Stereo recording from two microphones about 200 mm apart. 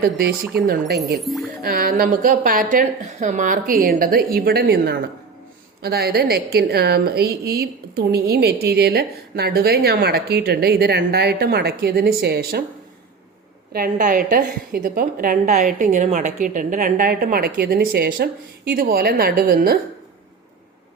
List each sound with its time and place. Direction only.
0.0 s a woman's voice: 50° right (ahead or behind)
13.7 s a woman's voice: 45° right (ahead or behind)